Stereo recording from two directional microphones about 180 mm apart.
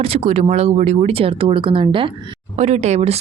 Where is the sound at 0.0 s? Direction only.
30° right (ahead or behind).